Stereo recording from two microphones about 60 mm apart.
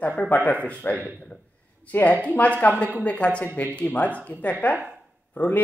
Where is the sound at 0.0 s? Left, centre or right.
Left.